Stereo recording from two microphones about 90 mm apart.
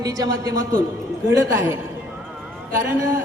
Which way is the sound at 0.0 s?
45° right (ahead or behind).